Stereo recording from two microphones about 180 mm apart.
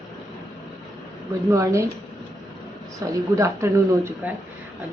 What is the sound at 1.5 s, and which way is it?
Speech, 15° right (ahead or behind).